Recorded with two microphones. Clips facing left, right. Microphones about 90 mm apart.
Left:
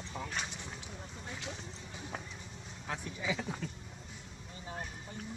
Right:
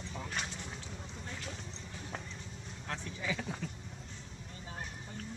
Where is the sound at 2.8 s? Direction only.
10° left (ahead or behind).